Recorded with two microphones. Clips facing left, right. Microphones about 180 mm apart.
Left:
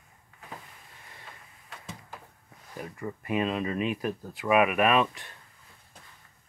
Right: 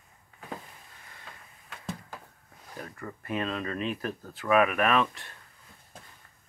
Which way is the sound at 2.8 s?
15° left (ahead or behind).